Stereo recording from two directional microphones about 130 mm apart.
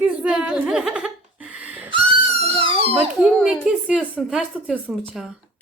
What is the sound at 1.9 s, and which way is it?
Wheeze, 40° right (ahead or behind).